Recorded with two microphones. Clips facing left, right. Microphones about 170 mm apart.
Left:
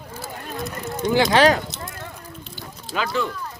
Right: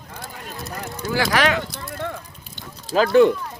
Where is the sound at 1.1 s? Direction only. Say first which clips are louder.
Left 4 dB; 20° left (ahead or behind).